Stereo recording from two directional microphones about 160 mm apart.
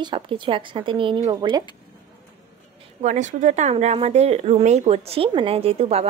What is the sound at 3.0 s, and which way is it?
Speech, 50° right (ahead or behind).